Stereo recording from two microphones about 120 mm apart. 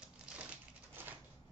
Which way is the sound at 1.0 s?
15° right (ahead or behind).